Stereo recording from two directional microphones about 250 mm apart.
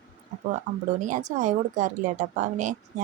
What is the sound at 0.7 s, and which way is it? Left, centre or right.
Speech, right.